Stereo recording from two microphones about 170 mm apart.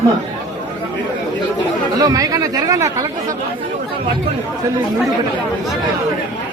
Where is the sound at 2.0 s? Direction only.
20° right (ahead or behind).